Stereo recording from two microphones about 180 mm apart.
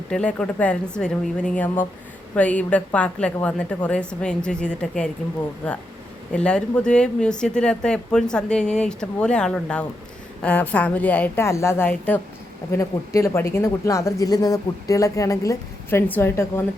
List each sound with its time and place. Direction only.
0.1 s speech: 5° left (ahead or behind)